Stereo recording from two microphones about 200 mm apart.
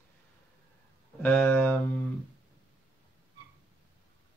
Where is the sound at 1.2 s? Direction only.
10° left (ahead or behind).